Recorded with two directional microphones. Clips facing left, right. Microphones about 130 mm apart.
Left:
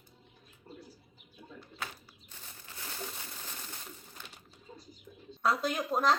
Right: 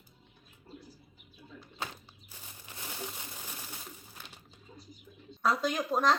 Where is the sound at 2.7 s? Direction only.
15° right (ahead or behind).